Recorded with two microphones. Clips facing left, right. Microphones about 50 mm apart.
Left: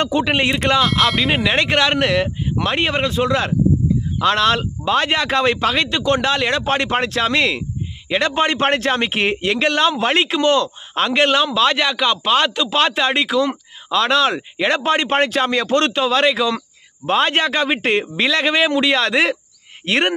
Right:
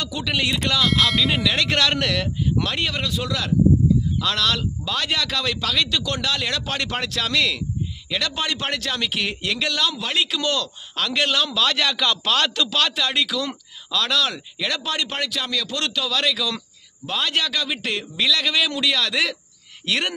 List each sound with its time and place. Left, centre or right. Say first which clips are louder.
0.0 s speech: left 7 dB; left
0.8 s speech: left 3 dB; centre
1.3 s speech: left 4 dB; left